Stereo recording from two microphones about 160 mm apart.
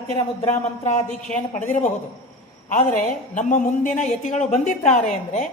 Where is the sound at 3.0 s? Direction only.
55° left (ahead or behind).